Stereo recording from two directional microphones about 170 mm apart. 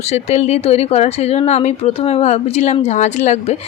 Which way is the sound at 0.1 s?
40° left (ahead or behind).